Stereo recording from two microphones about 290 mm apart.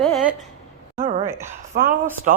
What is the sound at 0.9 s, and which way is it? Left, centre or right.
Speech, centre.